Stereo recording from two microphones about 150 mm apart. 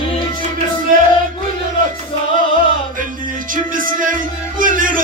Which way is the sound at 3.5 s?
65° right (ahead or behind).